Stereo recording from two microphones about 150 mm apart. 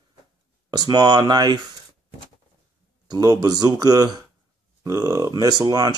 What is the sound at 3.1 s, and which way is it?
Speech, 25° right (ahead or behind).